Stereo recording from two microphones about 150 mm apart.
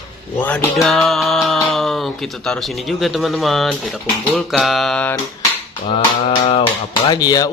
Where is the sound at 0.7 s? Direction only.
Centre (ahead or behind).